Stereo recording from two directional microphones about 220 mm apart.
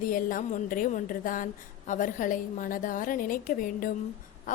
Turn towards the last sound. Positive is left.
turn(degrees=35)  # may be behind; listen again after turning